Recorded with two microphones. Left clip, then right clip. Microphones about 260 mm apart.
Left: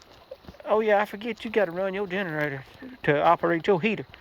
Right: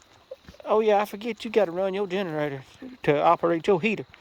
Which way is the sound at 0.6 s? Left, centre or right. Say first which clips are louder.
Right 1 dB; right.